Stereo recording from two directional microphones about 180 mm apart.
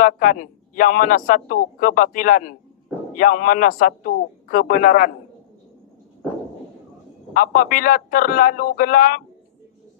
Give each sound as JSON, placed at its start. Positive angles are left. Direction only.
{"t": 0.0, "sound": "a man's voice", "side_deg": 50}
{"t": 7.3, "sound": "a man's voice", "side_deg": 50}